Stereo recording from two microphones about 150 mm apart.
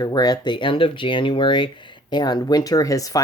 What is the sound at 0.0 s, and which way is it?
Speech, 25° left (ahead or behind).